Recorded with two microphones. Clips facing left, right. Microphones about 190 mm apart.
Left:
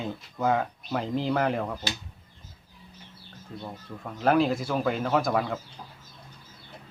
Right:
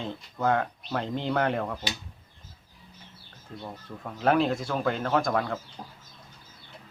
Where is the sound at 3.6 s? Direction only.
Centre (ahead or behind).